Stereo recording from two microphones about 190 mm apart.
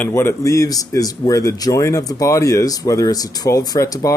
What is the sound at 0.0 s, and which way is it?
Speech, 15° left (ahead or behind).